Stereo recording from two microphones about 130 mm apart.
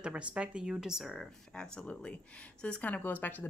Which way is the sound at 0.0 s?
10° right (ahead or behind).